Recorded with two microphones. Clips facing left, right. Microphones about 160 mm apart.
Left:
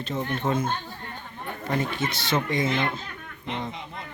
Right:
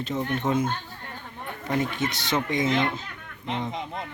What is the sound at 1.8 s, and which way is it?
Speech, 15° right (ahead or behind).